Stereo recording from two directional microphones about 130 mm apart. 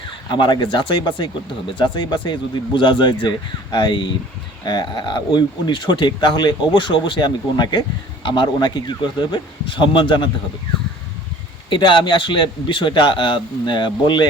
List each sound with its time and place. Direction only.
0.3 s speech: 35° left (ahead or behind)
11.7 s speech: 35° left (ahead or behind)